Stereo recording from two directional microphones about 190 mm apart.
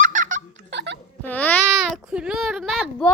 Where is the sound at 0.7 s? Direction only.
65° right (ahead or behind).